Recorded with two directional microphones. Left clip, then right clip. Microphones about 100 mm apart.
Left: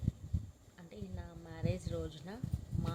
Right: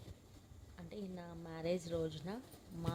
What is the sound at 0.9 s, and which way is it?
A woman's voice, 75° right (ahead or behind).